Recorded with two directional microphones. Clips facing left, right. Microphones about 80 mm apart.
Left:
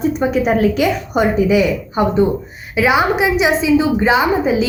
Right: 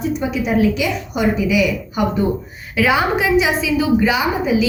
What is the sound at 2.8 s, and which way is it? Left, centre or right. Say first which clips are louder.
A woman's voice: left 2 dB; centre.